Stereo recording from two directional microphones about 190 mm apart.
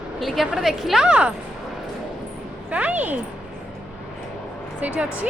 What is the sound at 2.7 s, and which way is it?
Speech, 5° right (ahead or behind).